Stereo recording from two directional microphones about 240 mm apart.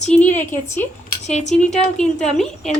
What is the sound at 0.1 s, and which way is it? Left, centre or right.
A woman's voice, centre.